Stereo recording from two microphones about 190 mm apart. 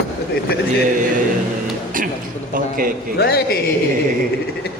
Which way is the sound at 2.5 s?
50° right (ahead or behind).